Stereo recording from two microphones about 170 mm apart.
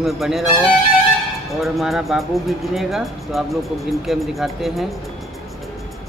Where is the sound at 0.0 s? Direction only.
Centre (ahead or behind).